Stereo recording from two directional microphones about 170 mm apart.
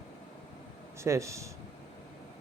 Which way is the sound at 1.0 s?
15° right (ahead or behind).